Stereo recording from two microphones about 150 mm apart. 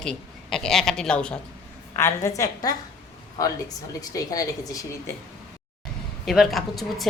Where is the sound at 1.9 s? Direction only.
20° left (ahead or behind).